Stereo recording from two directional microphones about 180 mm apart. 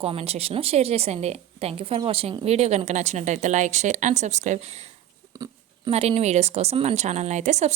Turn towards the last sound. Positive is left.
turn(degrees=-40)  # may be behind; listen again after turning